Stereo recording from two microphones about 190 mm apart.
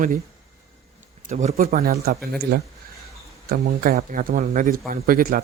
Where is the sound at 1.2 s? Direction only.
35° right (ahead or behind).